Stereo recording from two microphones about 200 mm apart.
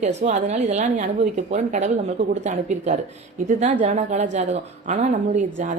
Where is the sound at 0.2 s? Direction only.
35° right (ahead or behind).